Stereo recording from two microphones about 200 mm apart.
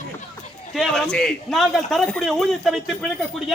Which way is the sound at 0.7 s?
Centre (ahead or behind).